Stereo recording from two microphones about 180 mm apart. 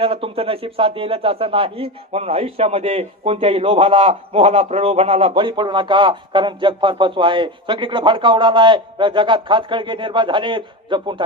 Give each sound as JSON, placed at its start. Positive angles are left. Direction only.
{"t": 0.0, "sound": "speech", "side_deg": -30}